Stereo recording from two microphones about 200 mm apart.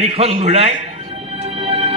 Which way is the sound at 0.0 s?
30° right (ahead or behind).